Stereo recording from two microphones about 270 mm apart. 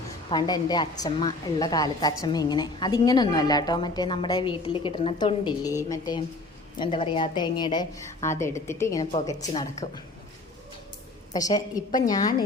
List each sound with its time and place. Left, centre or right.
0.3 s a woman's voice: centre
11.3 s a woman's voice: centre